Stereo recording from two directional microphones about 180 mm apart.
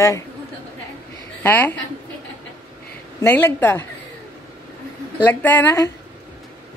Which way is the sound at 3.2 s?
10° left (ahead or behind).